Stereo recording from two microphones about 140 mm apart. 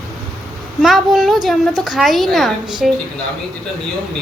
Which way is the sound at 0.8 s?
Centre (ahead or behind).